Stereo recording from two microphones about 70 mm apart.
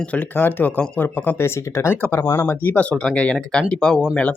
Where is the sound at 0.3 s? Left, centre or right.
Left.